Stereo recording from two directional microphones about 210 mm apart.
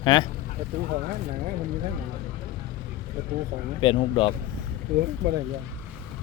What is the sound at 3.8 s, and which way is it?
Speech, 25° left (ahead or behind).